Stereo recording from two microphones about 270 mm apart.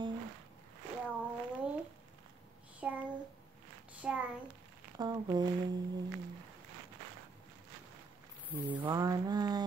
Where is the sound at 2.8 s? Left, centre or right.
Centre.